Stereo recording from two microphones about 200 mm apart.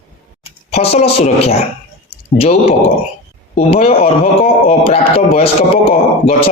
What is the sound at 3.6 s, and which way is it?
Speech, 30° left (ahead or behind).